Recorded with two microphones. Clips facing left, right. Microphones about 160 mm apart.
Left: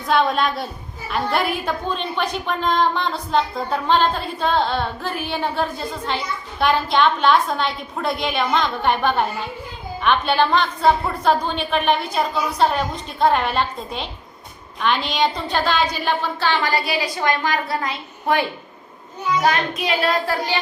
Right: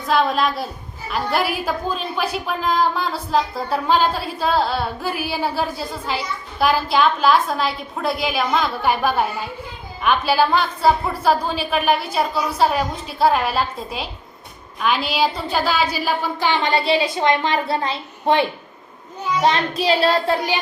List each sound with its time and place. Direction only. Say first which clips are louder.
0.1 s a woman's voice: even; centre (ahead or behind); by 20.6 s 20° right (ahead or behind)